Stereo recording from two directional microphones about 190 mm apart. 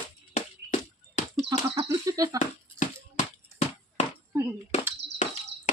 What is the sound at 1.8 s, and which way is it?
Speech, 20° right (ahead or behind).